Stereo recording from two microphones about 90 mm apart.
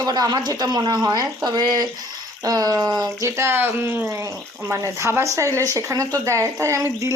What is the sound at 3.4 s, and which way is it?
Speech, 25° right (ahead or behind).